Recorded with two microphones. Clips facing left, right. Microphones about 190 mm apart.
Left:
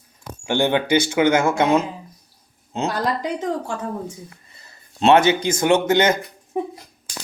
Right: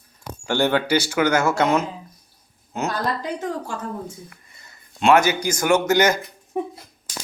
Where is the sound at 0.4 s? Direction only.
15° left (ahead or behind).